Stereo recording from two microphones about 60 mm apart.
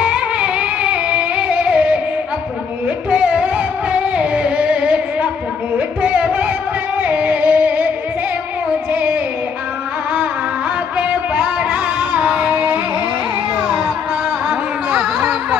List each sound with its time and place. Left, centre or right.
0.0 s music: centre
3.1 s music: right
7.0 s singing: right
8.9 s music: right
11.0 s music: right